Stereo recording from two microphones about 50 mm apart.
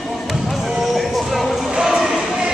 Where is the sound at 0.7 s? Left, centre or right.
Centre.